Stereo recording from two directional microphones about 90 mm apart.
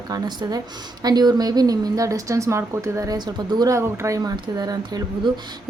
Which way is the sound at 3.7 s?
35° right (ahead or behind).